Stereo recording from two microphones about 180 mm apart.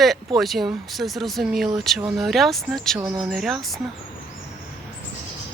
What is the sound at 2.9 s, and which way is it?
Speech, 20° right (ahead or behind).